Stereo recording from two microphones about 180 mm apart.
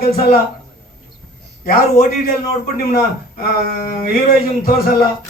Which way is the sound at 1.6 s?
55° left (ahead or behind).